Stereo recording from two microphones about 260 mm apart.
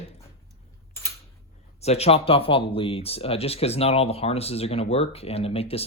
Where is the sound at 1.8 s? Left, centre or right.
Left.